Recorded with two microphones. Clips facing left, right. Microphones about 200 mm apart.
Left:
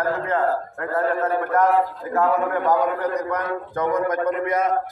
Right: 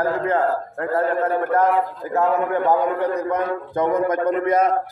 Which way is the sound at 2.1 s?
25° right (ahead or behind).